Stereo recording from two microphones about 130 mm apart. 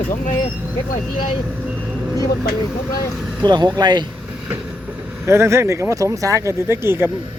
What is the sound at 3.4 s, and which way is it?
Speech, 35° right (ahead or behind).